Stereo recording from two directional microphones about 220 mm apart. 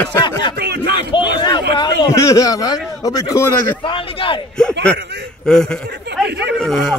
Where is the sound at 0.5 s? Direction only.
50° right (ahead or behind).